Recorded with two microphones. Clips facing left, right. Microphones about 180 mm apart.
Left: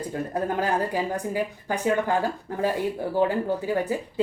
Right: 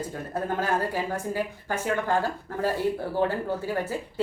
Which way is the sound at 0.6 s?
15° left (ahead or behind).